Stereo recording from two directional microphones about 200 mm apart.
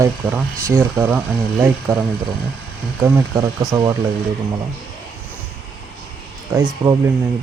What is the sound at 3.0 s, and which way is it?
Speech, 20° right (ahead or behind).